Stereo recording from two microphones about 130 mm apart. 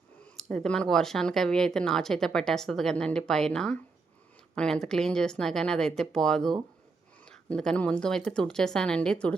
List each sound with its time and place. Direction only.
0.3 s speech: 5° left (ahead or behind)